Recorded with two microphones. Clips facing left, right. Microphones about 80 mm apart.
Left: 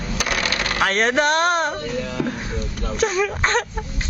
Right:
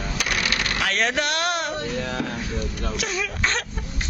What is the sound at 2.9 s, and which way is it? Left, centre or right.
Speech, left.